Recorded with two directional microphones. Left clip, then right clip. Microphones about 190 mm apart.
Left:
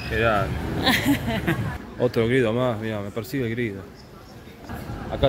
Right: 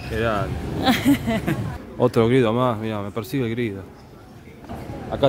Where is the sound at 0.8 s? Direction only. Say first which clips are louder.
Right 2 dB; 60° right (ahead or behind).